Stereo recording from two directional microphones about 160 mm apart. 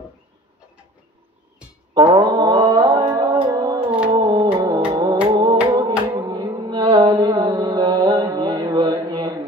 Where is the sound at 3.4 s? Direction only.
25° right (ahead or behind).